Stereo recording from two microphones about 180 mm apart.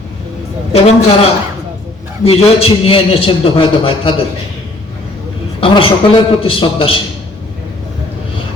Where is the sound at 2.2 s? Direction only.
30° left (ahead or behind).